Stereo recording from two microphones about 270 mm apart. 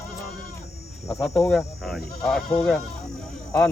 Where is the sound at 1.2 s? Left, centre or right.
Centre.